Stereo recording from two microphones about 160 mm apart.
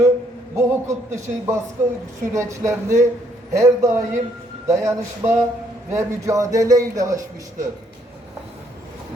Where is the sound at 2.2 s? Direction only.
20° right (ahead or behind).